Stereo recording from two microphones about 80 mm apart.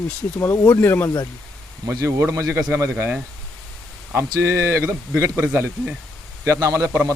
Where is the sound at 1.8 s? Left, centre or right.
Right.